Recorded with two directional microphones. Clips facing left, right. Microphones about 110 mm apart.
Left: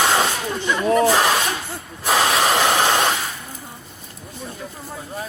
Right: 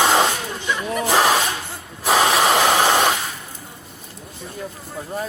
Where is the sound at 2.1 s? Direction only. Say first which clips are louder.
Right 2 dB; 20° right (ahead or behind).